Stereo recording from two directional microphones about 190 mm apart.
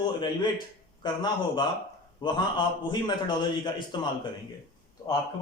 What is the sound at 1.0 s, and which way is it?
A man's voice, 25° left (ahead or behind).